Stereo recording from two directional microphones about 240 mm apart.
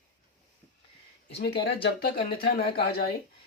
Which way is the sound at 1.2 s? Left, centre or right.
Left.